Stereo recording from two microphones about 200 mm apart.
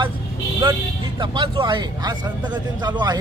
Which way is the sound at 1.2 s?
25° right (ahead or behind).